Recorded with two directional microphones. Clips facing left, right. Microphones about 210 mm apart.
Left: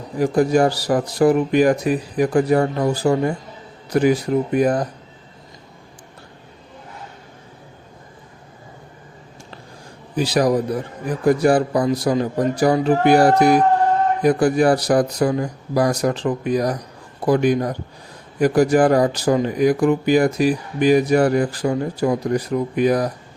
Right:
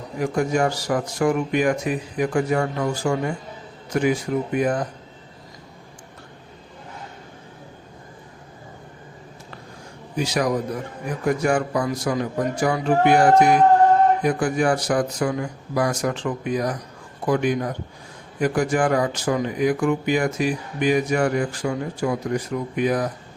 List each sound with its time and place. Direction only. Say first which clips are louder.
0.2 s speech: left 5 dB; 35° left (ahead or behind)
10.2 s speech: left 5 dB; 35° left (ahead or behind)